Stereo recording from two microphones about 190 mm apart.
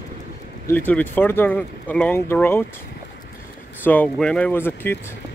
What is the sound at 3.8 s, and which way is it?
Speech, 5° left (ahead or behind).